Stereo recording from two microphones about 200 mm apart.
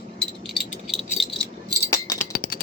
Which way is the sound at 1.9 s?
15° left (ahead or behind).